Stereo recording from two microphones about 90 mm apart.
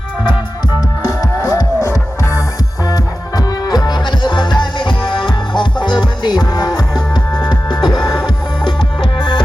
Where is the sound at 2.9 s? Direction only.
45° left (ahead or behind).